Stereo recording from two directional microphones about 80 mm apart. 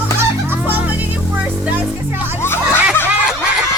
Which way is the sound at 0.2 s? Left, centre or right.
Right.